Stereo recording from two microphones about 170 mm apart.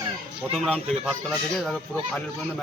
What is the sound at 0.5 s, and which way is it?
A man's voice, centre (ahead or behind).